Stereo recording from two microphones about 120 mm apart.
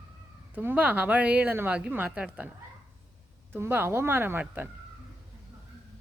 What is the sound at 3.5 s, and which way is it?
Speech, 20° right (ahead or behind).